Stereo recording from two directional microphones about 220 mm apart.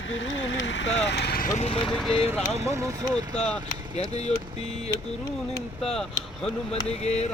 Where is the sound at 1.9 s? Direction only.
Centre (ahead or behind).